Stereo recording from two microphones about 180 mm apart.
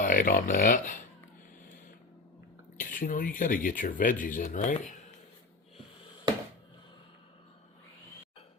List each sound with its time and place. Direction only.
0.0 s speech: 50° left (ahead or behind)
2.7 s speech: 50° left (ahead or behind)